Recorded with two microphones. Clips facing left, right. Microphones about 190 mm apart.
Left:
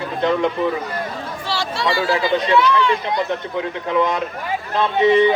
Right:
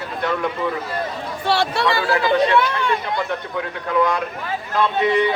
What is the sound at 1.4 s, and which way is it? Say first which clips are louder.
Speech: right 4 dB; 60° right (ahead or behind).